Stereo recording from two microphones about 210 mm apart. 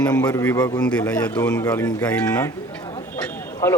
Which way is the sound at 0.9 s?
5° left (ahead or behind).